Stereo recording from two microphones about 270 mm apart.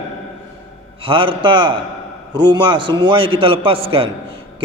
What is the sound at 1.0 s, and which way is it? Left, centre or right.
A man's voice, centre.